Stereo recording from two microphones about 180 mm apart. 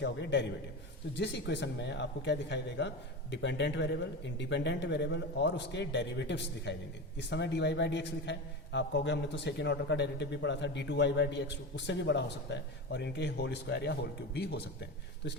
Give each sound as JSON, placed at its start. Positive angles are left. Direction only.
{"t": 0.0, "sound": "a man's voice", "side_deg": 75}